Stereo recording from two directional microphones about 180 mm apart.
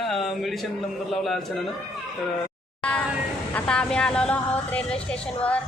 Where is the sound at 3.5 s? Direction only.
5° left (ahead or behind).